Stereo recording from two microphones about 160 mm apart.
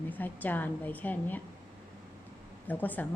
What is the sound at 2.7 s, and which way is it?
Speech, 10° left (ahead or behind).